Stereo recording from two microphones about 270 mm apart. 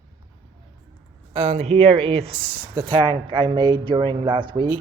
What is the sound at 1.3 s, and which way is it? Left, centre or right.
Speech, right.